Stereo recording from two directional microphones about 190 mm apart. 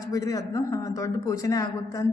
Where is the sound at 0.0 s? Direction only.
15° left (ahead or behind).